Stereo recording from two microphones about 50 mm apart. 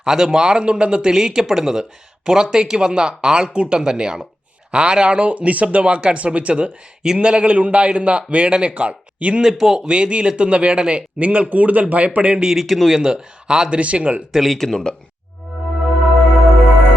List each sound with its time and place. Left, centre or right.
0.0 s speech: centre
9.4 s speech: centre
9.8 s speech: right
12.4 s speech: centre
13.0 s speech: centre
13.7 s speech: right
14.3 s speech: centre